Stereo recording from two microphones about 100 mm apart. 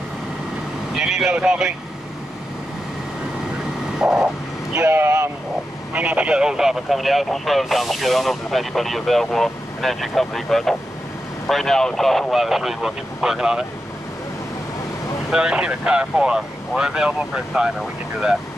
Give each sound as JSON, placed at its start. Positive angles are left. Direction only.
{"t": 0.9, "sound": "speech", "side_deg": -5}
{"t": 4.0, "sound": "vehicle", "side_deg": -5}
{"t": 4.7, "sound": "vehicle", "side_deg": -20}
{"t": 5.9, "sound": "speech", "side_deg": -15}
{"t": 15.3, "sound": "speech", "side_deg": -10}